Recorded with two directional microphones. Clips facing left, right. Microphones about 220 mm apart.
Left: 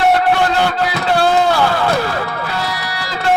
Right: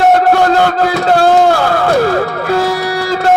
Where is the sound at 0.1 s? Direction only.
45° right (ahead or behind).